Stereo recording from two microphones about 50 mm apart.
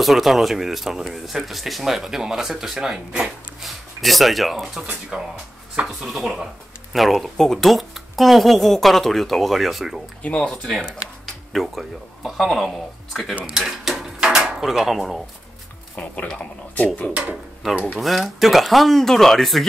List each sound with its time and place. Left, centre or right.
0.0 s speech: centre
5.1 s speech: centre
6.0 s speech: centre
10.3 s speech: centre
11.5 s speech: centre
13.5 s dishes: centre
14.7 s speech: centre
16.0 s speech: left
17.1 s speech: right
17.9 s speech: centre